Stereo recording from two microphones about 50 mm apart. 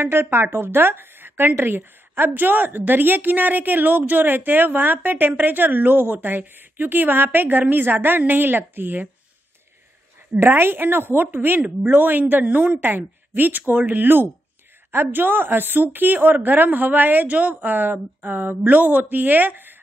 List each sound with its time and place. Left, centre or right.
0.0 s a woman's voice: right
10.4 s a woman's voice: right